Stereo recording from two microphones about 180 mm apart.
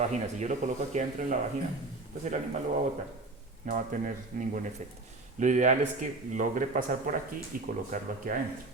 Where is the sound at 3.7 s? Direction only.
45° right (ahead or behind).